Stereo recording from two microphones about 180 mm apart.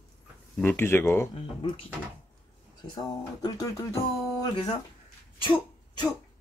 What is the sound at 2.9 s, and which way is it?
Speech, 25° left (ahead or behind).